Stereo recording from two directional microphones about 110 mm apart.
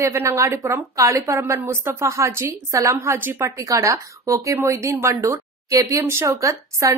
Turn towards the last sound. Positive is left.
turn(degrees=-30)  # may be behind; listen again after turning